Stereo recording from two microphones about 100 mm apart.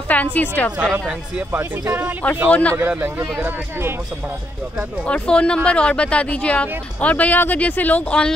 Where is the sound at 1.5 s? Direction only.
20° right (ahead or behind).